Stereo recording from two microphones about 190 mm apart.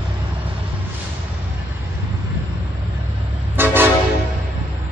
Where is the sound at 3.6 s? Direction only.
10° right (ahead or behind).